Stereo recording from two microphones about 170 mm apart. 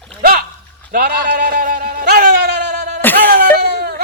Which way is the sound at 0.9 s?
60° right (ahead or behind).